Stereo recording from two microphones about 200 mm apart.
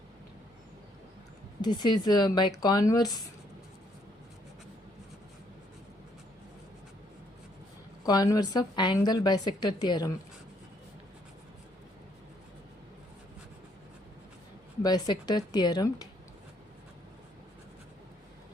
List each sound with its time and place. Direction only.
1.6 s a woman's voice: 20° left (ahead or behind)
8.0 s a woman's voice: 20° left (ahead or behind)
14.8 s a woman's voice: 20° left (ahead or behind)